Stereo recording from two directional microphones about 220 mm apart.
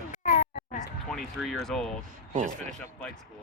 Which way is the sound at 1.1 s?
Centre (ahead or behind).